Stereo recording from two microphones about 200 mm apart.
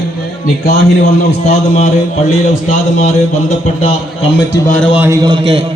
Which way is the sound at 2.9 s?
35° left (ahead or behind).